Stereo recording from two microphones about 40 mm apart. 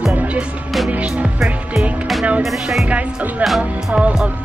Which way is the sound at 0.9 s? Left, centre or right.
Right.